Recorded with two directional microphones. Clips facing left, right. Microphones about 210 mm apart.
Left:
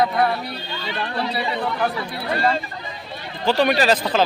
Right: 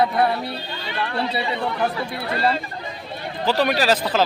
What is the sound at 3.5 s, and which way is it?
Speech, 5° right (ahead or behind).